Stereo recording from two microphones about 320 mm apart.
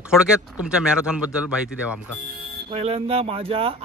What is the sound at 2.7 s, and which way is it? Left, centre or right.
Speech, centre.